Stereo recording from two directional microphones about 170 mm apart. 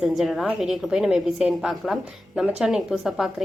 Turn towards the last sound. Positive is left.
turn(degrees=0)  # may be behind; listen again after turning